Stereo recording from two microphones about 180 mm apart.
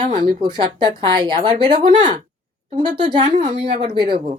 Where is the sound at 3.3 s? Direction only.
35° right (ahead or behind).